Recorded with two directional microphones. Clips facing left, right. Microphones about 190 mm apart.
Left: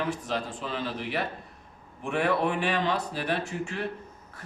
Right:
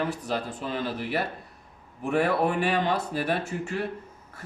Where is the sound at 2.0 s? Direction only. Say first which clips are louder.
Right 2 dB; 40° right (ahead or behind).